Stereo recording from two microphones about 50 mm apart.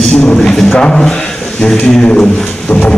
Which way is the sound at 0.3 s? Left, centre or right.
Centre.